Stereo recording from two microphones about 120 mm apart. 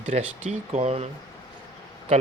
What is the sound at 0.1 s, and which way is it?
Speech, 70° right (ahead or behind).